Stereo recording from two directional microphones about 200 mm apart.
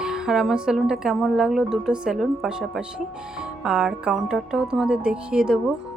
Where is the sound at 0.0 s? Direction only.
5° right (ahead or behind).